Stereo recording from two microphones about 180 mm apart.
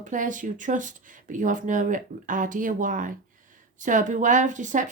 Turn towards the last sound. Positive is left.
turn(degrees=-45)  # may be behind; listen again after turning